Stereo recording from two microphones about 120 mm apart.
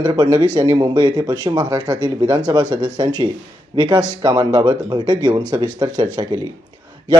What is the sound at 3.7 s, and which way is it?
Speech, 40° right (ahead or behind).